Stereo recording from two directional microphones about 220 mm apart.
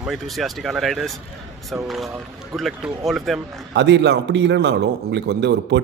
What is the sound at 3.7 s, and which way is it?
A man's voice, 50° right (ahead or behind).